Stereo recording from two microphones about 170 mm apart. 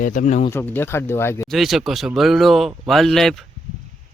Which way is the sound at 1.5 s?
Centre (ahead or behind).